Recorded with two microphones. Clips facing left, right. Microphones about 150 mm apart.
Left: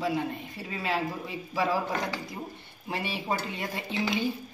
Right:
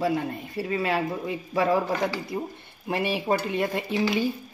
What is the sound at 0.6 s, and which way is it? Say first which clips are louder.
Speech: right 6 dB; 60° right (ahead or behind).